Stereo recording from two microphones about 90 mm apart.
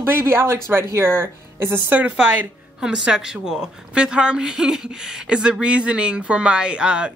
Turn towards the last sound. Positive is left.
turn(degrees=-10)  # may be behind; listen again after turning